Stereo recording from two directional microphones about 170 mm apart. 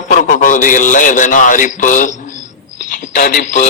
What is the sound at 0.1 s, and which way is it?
A man's voice, 50° left (ahead or behind).